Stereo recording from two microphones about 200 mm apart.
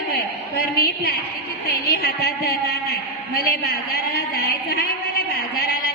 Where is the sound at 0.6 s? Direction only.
50° left (ahead or behind).